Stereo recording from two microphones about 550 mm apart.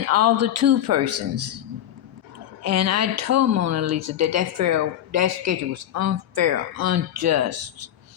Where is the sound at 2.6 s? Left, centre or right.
Right.